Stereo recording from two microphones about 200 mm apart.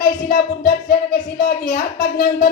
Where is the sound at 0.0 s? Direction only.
45° left (ahead or behind).